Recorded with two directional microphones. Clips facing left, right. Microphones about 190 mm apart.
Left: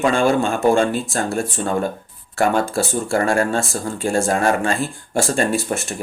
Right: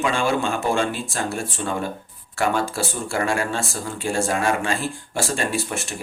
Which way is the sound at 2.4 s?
45° left (ahead or behind).